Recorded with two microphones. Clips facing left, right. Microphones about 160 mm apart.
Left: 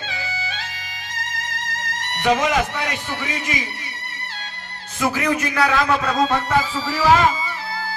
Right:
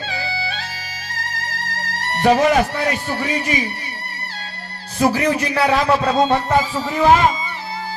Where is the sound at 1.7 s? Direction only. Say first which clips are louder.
Right 6 dB; 35° right (ahead or behind).